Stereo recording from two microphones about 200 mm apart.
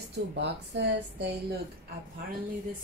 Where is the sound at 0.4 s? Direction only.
60° right (ahead or behind).